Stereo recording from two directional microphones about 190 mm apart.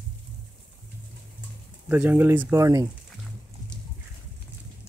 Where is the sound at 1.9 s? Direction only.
10° right (ahead or behind).